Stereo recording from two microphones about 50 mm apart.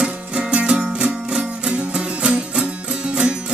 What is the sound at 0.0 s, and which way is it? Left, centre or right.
Music, centre.